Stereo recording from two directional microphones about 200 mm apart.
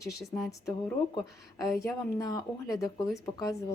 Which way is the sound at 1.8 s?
15° left (ahead or behind).